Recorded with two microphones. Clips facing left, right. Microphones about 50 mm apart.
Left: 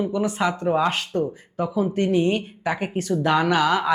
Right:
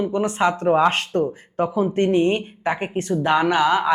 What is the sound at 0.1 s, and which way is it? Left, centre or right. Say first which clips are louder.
Speech: right 3 dB; right.